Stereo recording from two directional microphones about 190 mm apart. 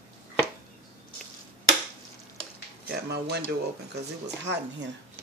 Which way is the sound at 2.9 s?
60° right (ahead or behind).